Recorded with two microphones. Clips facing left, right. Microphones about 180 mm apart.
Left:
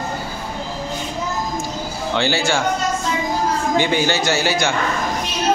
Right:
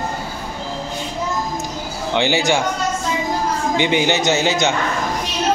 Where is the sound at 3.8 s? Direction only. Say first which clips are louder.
Right 2 dB; 20° right (ahead or behind).